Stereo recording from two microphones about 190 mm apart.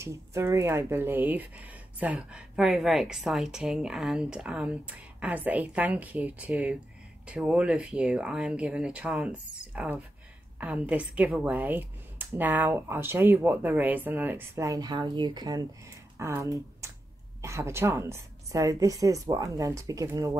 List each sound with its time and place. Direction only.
0.0 s speech: 15° right (ahead or behind)